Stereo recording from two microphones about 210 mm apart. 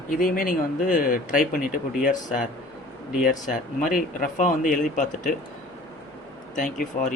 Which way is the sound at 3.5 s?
40° left (ahead or behind).